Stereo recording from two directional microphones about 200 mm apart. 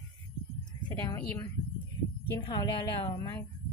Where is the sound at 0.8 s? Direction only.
20° left (ahead or behind).